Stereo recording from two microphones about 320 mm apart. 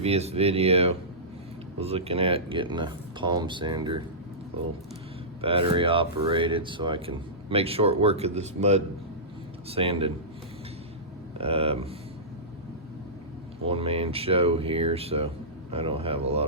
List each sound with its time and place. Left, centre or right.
0.0 s speech: centre
5.4 s speech: centre
11.3 s speech: centre
13.7 s speech: centre